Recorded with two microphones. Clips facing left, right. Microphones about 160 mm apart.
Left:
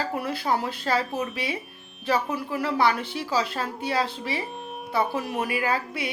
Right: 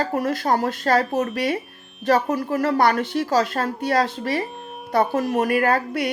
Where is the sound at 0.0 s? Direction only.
45° right (ahead or behind).